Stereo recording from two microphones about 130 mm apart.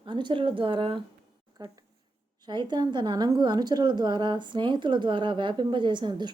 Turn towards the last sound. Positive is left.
turn(degrees=-35)  # may be behind; listen again after turning